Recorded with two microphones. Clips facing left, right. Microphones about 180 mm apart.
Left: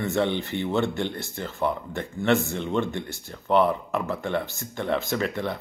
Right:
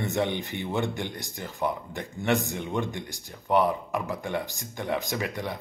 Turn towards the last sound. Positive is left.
turn(degrees=-15)  # may be behind; listen again after turning